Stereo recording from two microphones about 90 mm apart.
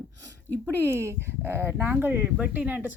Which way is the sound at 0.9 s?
30° right (ahead or behind).